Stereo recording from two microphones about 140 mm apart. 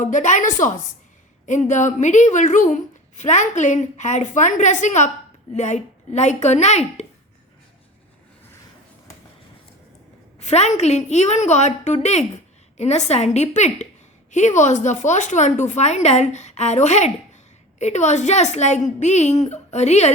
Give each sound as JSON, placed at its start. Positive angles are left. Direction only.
{"t": 0.0, "sound": "a woman's voice", "side_deg": 60}
{"t": 10.4, "sound": "a woman's voice", "side_deg": 55}